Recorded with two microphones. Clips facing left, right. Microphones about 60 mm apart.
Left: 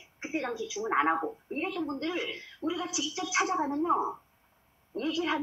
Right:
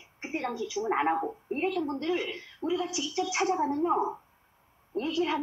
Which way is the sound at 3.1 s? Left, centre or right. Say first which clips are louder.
Right 1 dB; centre.